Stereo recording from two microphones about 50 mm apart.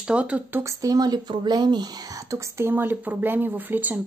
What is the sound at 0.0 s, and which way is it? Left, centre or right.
Speech, right.